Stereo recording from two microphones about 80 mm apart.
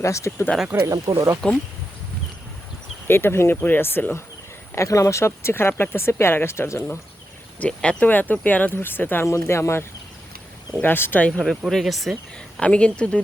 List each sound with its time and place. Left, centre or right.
0.0 s speech: left
0.3 s speech: left
0.7 s speech: right
1.1 s speech: right
3.1 s speech: left
4.7 s speech: left
7.6 s speech: centre
11.3 s speech: centre
12.5 s speech: centre